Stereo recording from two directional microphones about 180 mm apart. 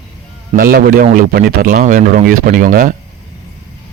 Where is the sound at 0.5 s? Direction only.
55° right (ahead or behind).